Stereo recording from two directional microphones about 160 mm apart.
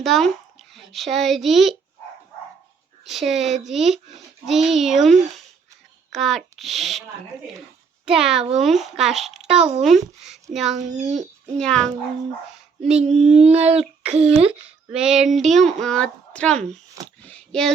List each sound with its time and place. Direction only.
0.0 s a child's voice: centre (ahead or behind)
3.1 s a child's voice: centre (ahead or behind)
8.0 s a child's voice: 5° right (ahead or behind)
10.8 s a child's voice: 50° right (ahead or behind)
11.6 s a child's voice: 5° left (ahead or behind)
13.7 s a sound: 40° right (ahead or behind)
14.9 s a child's voice: 5° right (ahead or behind)